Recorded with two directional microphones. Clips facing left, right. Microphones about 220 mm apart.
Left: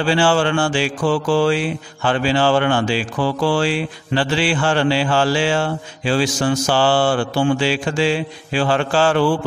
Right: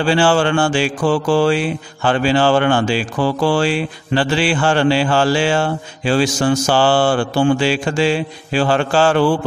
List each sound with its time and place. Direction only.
0.0 s speech: 45° right (ahead or behind)